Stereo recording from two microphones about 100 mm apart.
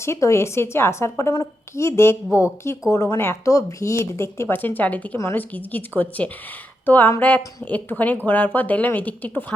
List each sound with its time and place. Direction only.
0.0 s a woman's voice: 30° left (ahead or behind)